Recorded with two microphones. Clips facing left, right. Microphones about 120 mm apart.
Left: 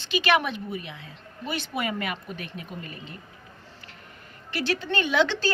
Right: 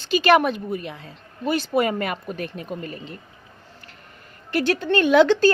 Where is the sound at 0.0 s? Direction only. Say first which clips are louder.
Right 7 dB; 40° right (ahead or behind).